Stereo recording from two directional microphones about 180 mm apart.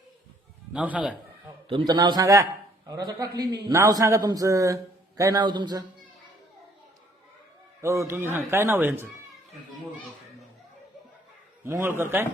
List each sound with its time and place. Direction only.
0.7 s speech: 5° right (ahead or behind)
1.7 s a man's voice: 20° right (ahead or behind)
7.8 s speech: 15° right (ahead or behind)
11.6 s speech: 15° right (ahead or behind)